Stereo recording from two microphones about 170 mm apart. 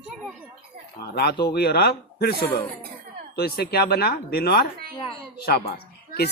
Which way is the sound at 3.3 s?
65° left (ahead or behind).